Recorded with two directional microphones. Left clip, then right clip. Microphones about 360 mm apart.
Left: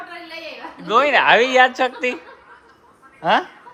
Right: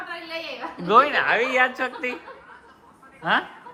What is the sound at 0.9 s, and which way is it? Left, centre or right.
Speech, centre.